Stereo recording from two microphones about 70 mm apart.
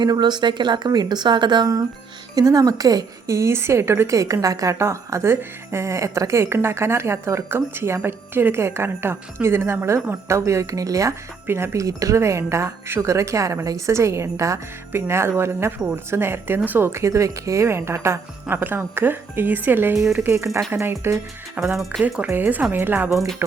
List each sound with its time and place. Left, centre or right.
0.0 s a woman's voice: right
2.3 s speech: right
3.3 s a woman's voice: right
11.4 s speech: right
14.9 s a woman's voice: right
16.9 s speech: right
18.4 s a woman's voice: right
20.3 s speech: right
21.6 s speech: centre
22.3 s a woman's voice: right
23.0 s speech: centre